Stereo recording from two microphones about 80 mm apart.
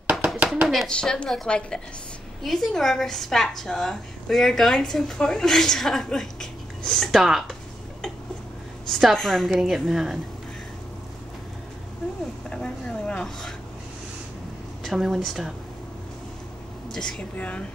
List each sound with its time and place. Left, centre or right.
0.0 s a sound: centre
0.7 s a woman's voice: centre
8.8 s a woman's voice: centre
12.4 s a sound: centre
14.8 s a woman's voice: centre
17.4 s a woman's voice: centre